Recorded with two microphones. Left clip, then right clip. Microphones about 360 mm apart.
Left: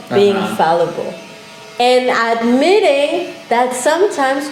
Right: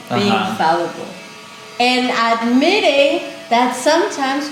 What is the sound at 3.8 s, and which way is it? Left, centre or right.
Speech, left.